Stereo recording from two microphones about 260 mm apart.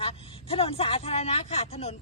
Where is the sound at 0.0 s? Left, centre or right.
Left.